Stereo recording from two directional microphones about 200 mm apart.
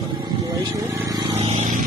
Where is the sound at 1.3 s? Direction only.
35° right (ahead or behind).